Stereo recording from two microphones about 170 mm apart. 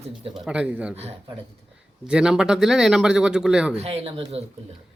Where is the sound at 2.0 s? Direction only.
5° right (ahead or behind).